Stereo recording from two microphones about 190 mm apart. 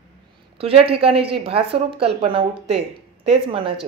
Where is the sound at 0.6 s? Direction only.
30° right (ahead or behind).